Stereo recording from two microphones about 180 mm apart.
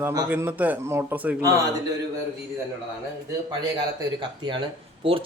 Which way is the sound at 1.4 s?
20° right (ahead or behind).